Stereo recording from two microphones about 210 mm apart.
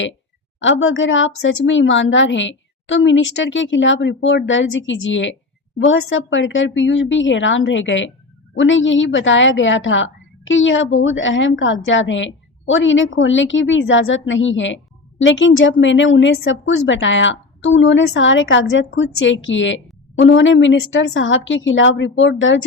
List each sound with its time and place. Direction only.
0.6 s a woman's voice: 65° left (ahead or behind)